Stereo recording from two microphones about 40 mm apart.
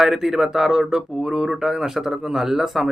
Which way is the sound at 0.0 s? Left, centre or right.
Centre.